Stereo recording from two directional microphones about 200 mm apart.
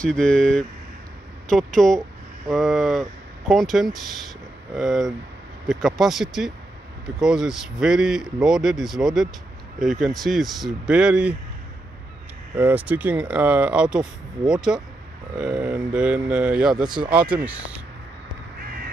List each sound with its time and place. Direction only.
0.0 s speech: 5° left (ahead or behind)
12.5 s speech: 10° right (ahead or behind)
16.8 s speech: 20° right (ahead or behind)
17.1 s speech: 5° right (ahead or behind)